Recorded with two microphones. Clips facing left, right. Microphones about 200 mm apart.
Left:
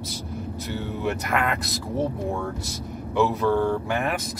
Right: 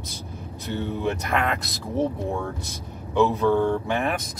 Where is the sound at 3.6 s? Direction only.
15° right (ahead or behind).